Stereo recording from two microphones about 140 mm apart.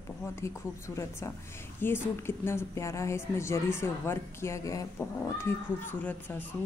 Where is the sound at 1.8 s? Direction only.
15° left (ahead or behind).